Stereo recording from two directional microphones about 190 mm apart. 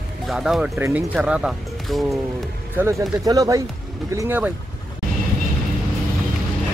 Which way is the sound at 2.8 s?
20° right (ahead or behind).